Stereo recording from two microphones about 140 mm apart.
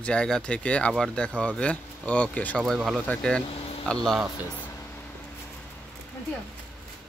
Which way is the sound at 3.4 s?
45° left (ahead or behind).